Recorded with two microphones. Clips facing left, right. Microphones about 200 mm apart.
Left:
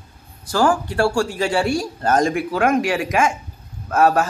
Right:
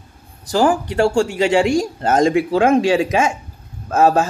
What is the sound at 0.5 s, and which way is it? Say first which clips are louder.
Speech: right 2 dB; 20° right (ahead or behind).